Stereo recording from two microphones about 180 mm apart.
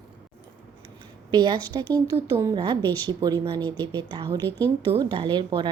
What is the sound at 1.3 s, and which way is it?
A woman's voice, 25° right (ahead or behind).